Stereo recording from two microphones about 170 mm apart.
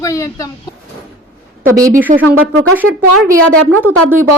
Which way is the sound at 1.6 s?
20° right (ahead or behind).